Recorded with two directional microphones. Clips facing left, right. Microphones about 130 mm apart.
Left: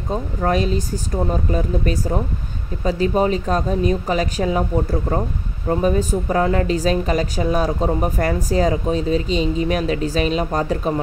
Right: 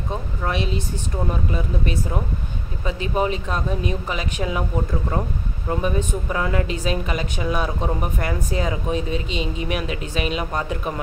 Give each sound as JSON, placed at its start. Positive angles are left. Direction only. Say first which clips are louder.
{"t": 0.1, "sound": "a woman's voice", "louder": "left 7 dB", "side_deg": 40}